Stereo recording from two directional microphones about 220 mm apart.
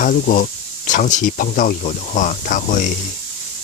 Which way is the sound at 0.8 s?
35° left (ahead or behind).